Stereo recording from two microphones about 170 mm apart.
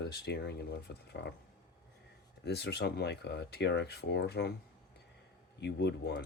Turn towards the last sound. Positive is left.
turn(degrees=85)